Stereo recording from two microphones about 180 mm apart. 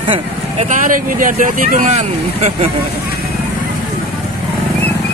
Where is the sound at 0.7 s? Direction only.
45° right (ahead or behind).